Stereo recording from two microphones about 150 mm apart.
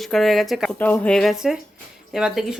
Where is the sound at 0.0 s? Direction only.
Centre (ahead or behind).